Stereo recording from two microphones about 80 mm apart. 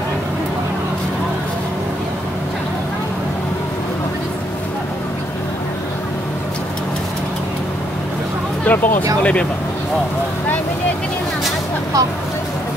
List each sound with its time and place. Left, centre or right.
8.6 s speech: left